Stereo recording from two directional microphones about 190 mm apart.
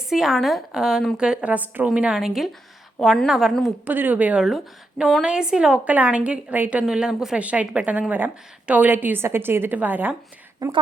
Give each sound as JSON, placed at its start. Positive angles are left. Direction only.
{"t": 0.1, "sound": "a woman's voice", "side_deg": 0}
{"t": 10.6, "sound": "a woman's voice", "side_deg": -20}